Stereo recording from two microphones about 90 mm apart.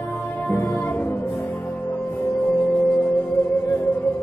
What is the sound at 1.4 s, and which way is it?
Music, 35° left (ahead or behind).